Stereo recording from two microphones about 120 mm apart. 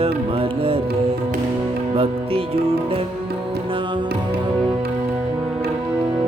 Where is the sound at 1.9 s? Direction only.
50° right (ahead or behind).